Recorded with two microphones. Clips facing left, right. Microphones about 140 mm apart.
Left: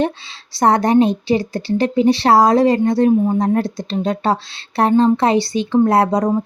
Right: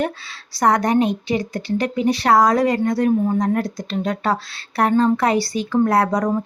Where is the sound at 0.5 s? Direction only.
30° left (ahead or behind).